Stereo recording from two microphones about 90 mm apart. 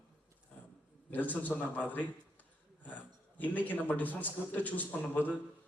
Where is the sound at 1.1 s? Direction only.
20° left (ahead or behind).